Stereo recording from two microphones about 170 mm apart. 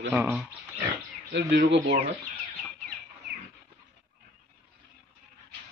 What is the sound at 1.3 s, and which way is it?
Speech, 80° right.